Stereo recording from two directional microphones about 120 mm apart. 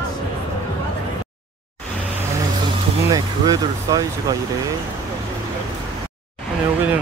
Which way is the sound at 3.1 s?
30° right (ahead or behind).